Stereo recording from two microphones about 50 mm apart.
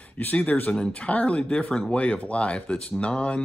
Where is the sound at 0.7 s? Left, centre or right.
Left.